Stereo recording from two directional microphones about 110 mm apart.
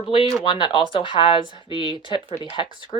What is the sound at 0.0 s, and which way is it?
Speech, 50° left (ahead or behind).